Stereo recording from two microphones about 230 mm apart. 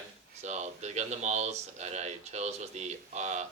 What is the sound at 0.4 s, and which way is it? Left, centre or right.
Speech, right.